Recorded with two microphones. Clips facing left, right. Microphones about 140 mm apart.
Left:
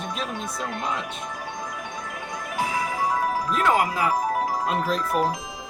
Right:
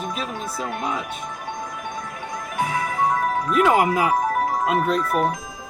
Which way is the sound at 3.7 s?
20° right (ahead or behind).